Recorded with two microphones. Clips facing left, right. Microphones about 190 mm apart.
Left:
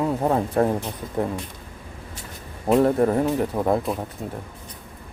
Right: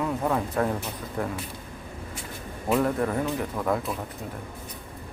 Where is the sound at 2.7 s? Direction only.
35° left (ahead or behind).